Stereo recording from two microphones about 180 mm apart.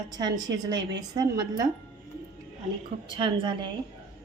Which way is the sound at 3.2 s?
25° right (ahead or behind).